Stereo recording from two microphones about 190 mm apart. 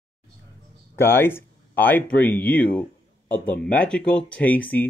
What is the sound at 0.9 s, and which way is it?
Speech, 10° left (ahead or behind).